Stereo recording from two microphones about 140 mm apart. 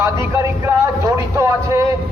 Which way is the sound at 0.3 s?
20° right (ahead or behind).